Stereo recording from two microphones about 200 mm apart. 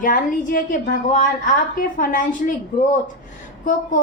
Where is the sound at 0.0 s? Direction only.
40° left (ahead or behind).